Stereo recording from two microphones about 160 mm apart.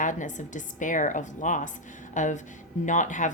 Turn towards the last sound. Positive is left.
turn(degrees=50)  # may be behind; listen again after turning